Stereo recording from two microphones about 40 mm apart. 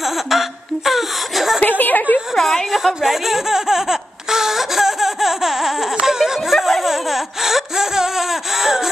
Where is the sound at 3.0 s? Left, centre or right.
Centre.